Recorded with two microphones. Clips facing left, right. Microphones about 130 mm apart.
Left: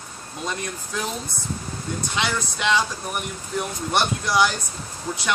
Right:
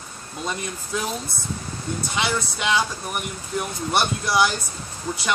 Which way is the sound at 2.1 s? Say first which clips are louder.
Right 1 dB; 5° right (ahead or behind).